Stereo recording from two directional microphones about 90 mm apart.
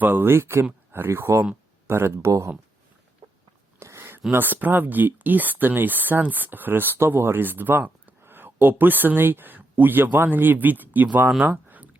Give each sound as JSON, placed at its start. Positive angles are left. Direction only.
{"t": 0.0, "sound": "speech", "side_deg": -20}
{"t": 3.8, "sound": "a sound", "side_deg": -30}
{"t": 4.3, "sound": "speech", "side_deg": -20}